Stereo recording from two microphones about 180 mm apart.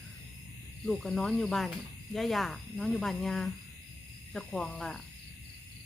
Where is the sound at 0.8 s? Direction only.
Centre (ahead or behind).